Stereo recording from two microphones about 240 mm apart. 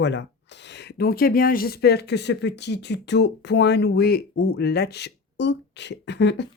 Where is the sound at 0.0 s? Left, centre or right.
Left.